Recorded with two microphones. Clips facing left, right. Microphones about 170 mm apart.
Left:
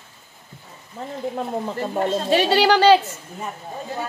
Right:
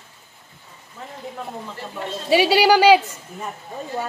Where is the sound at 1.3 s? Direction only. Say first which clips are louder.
Left 8 dB; 45° left (ahead or behind).